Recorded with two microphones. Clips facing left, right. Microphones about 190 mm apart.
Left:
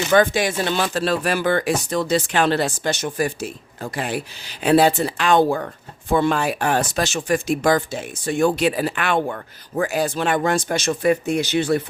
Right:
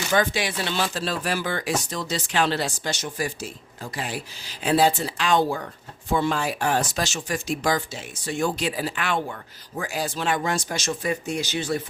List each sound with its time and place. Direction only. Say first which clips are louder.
0.1 s speech: left 6 dB; 50° left (ahead or behind)